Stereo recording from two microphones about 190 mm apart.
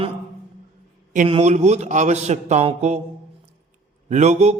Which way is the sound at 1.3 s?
35° right (ahead or behind).